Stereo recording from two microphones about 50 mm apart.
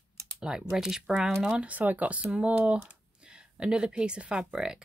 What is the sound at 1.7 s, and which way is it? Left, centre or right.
Speech, right.